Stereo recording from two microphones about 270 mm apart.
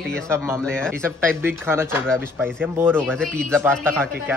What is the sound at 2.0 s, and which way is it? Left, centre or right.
Speech, centre.